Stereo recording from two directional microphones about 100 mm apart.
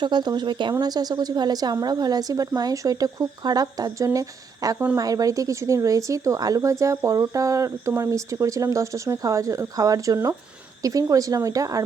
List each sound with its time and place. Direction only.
0.0 s speech: 45° right (ahead or behind)
0.7 s speech: 40° right (ahead or behind)